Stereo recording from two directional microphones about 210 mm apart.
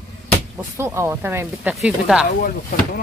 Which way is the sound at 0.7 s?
10° right (ahead or behind).